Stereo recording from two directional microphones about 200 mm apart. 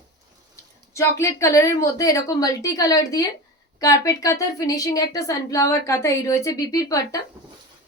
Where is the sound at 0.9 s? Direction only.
15° left (ahead or behind).